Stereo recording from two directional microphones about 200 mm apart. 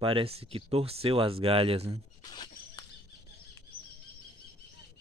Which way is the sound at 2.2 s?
20° left (ahead or behind).